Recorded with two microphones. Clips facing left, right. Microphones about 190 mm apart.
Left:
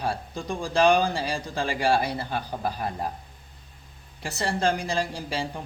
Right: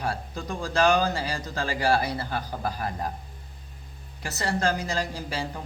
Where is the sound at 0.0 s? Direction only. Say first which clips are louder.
Left 1 dB; 15° left (ahead or behind).